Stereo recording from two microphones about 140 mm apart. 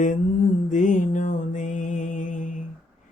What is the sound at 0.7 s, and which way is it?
Music, 65° left (ahead or behind).